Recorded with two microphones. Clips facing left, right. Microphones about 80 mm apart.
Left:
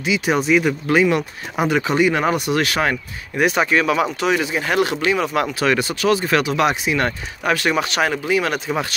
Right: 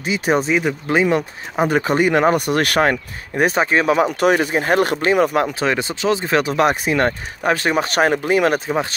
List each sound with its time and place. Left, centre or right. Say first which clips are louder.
0.0 s speech: right 1 dB; right
1.0 s speech: even; right
4.2 s speech: right 4 dB; right
7.1 s speech: right 2 dB; right